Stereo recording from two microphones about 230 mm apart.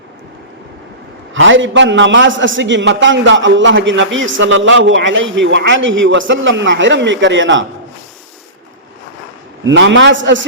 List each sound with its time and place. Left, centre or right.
1.3 s a man's voice: right
9.6 s a man's voice: right